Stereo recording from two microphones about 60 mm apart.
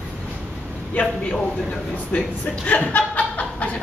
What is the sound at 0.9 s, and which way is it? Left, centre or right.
Speech, left.